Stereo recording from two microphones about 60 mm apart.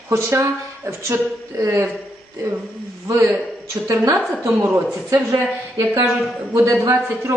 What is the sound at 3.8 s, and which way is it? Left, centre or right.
Speech, right.